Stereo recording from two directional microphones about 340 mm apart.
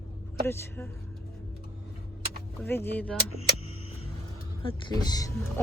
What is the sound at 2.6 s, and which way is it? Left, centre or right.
Speech, centre.